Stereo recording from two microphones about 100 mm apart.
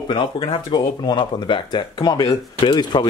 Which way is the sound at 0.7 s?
45° left (ahead or behind).